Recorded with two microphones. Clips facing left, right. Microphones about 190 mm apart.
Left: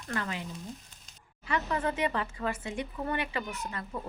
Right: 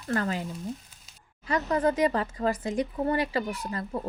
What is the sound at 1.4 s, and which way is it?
A woman's voice, 40° right (ahead or behind).